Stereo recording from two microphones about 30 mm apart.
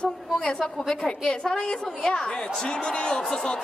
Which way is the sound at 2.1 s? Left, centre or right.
Left.